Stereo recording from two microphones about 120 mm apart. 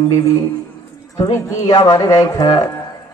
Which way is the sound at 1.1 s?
25° left (ahead or behind).